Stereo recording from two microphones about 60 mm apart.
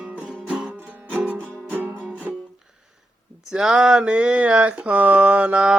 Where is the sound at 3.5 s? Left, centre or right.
Centre.